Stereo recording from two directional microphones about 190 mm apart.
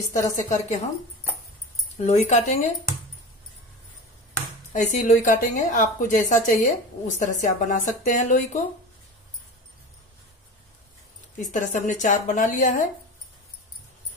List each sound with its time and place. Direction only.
0.1 s a woman's voice: 40° left (ahead or behind)
2.0 s a woman's voice: 35° left (ahead or behind)
4.7 s a woman's voice: 40° left (ahead or behind)
11.3 s a woman's voice: 40° left (ahead or behind)